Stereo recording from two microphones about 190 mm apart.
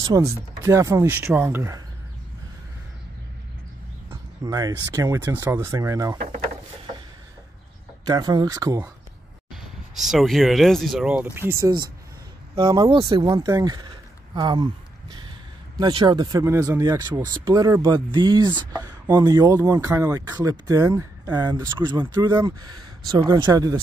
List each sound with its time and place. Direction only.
0.0 s speech: 20° right (ahead or behind)
4.1 s speech: 20° right (ahead or behind)
8.0 s speech: 20° right (ahead or behind)
9.5 s speech: centre (ahead or behind); by 23.8 s 20° right (ahead or behind)